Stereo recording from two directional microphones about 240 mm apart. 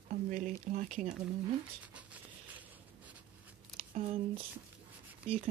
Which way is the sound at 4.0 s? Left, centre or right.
Right.